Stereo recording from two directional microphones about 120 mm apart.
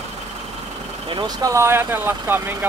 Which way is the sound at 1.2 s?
30° right (ahead or behind).